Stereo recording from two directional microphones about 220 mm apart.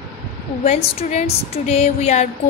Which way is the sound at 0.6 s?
30° left (ahead or behind).